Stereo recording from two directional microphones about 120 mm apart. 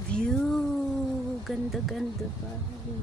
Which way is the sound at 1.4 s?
Centre (ahead or behind).